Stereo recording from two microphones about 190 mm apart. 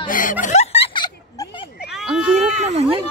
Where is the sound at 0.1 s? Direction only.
45° left (ahead or behind); by 1.5 s 25° left (ahead or behind).